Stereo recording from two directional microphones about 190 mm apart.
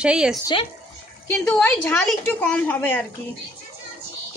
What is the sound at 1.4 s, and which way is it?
A woman's voice, 5° left (ahead or behind).